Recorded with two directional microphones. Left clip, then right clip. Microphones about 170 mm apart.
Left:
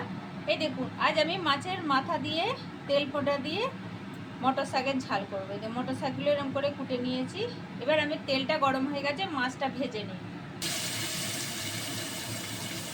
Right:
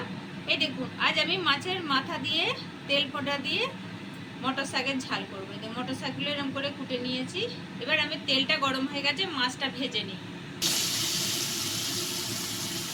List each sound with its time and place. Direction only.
0.4 s a woman's voice: 50° left (ahead or behind)